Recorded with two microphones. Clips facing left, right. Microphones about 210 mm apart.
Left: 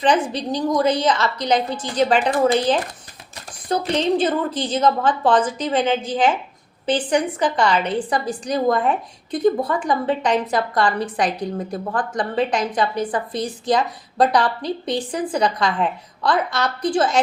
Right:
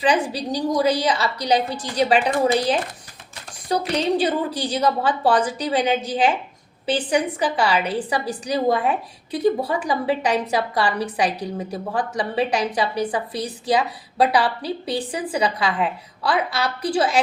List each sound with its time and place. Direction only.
0.0 s a woman's voice: 10° right (ahead or behind)
1.4 s a woman's voice: 35° right (ahead or behind)
2.2 s a woman's voice: 10° right (ahead or behind)
3.9 s a woman's voice: 10° right (ahead or behind)